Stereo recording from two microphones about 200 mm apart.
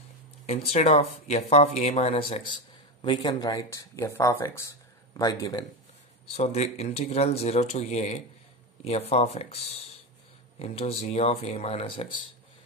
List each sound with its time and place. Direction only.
0.7 s speech: 30° left (ahead or behind)
6.3 s speech: 30° left (ahead or behind)